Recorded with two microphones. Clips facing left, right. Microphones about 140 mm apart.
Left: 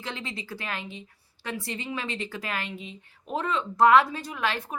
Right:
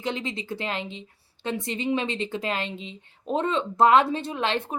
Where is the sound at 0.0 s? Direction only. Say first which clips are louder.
Right 6 dB; 20° right (ahead or behind).